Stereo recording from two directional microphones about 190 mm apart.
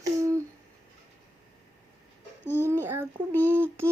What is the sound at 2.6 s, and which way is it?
Humming, 10° right (ahead or behind).